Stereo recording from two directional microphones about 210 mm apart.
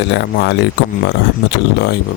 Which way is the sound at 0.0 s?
55° left (ahead or behind).